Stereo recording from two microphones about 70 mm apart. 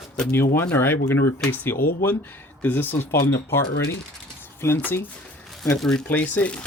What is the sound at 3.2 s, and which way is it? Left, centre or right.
Speech, left.